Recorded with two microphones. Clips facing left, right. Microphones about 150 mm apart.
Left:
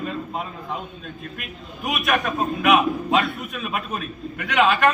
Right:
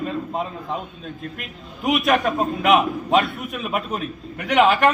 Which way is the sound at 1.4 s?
25° right (ahead or behind).